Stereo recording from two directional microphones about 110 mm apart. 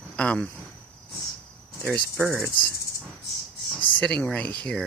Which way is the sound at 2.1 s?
15° right (ahead or behind).